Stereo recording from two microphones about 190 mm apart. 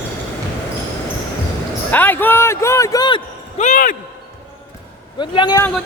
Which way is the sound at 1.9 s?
10° left (ahead or behind).